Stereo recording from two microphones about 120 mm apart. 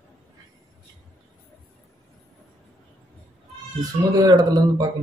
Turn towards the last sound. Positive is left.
turn(degrees=-35)  # may be behind; listen again after turning